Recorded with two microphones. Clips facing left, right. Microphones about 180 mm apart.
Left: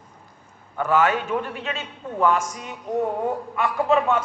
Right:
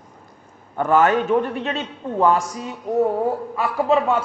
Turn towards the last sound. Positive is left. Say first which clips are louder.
# right 2 dB
turn(degrees=-30)  # may be behind; listen again after turning